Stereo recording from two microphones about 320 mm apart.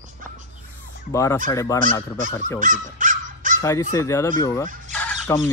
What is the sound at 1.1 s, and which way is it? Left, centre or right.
Speech, centre.